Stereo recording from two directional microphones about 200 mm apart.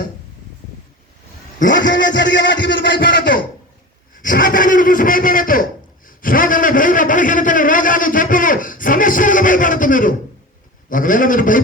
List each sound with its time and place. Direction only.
1.7 s music: 65° left (ahead or behind)
3.0 s a man's voice: 45° left (ahead or behind)